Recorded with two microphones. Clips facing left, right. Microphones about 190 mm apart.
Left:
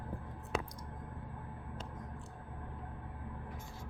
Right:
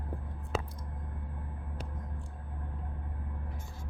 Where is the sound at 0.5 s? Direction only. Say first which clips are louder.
Right 2 dB; 5° right (ahead or behind).